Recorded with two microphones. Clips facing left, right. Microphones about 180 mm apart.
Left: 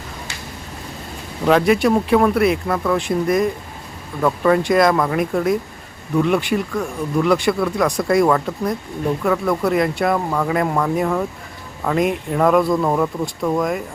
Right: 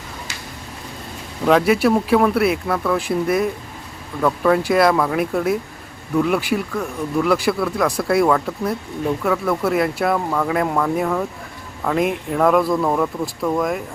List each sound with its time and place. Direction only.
1.5 s speech: centre (ahead or behind)